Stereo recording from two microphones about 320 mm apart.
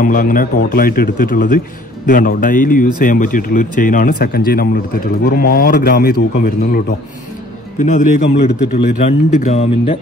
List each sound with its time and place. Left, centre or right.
0.0 s speech: left
8.4 s speech: left